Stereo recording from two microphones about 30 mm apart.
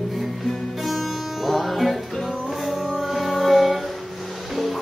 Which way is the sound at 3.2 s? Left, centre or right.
Centre.